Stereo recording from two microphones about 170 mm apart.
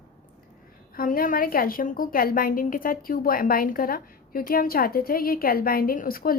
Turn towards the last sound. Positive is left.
turn(degrees=60)  # may be behind; listen again after turning